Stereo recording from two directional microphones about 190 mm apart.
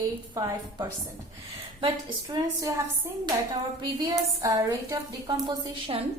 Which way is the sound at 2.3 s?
15° right (ahead or behind).